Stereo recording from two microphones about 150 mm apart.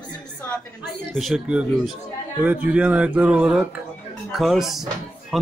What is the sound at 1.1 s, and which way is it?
Speech, centre (ahead or behind).